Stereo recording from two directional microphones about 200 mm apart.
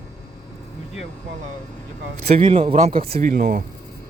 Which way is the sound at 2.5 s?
30° right (ahead or behind).